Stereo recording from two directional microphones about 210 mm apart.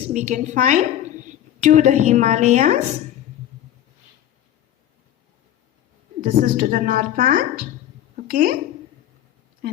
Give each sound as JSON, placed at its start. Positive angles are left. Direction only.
{"t": 0.1, "sound": "a woman's voice", "side_deg": -35}
{"t": 6.2, "sound": "a woman's voice", "side_deg": -45}